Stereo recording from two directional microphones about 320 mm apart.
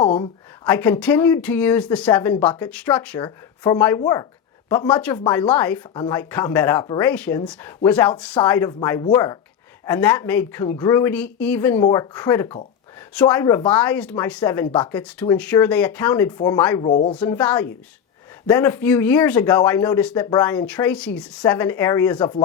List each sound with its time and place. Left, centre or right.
0.0 s a sound: centre
0.6 s speech: centre
17.2 s speech: centre